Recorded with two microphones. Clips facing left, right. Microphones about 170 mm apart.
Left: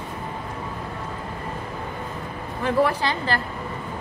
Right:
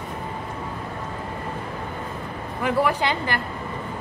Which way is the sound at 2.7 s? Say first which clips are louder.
Left 1 dB; 15° right (ahead or behind).